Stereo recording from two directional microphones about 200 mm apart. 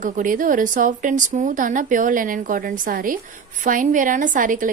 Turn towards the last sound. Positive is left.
turn(degrees=-40)  # may be behind; listen again after turning